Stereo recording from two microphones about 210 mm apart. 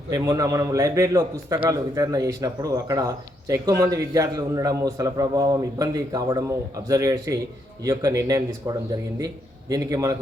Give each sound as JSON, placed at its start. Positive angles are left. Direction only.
{"t": 0.1, "sound": "a man's voice", "side_deg": -15}